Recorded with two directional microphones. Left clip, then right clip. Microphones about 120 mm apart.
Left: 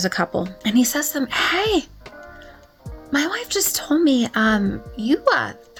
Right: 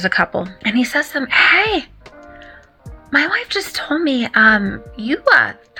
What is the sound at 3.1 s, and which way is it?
A woman's voice, 45° left (ahead or behind).